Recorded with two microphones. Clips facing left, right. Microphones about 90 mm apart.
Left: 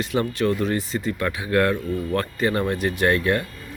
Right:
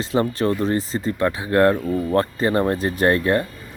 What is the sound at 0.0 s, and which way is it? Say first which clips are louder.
Speech: right 2 dB; 30° right (ahead or behind).